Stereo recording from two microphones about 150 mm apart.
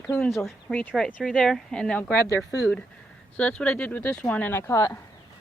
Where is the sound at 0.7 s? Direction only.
10° left (ahead or behind).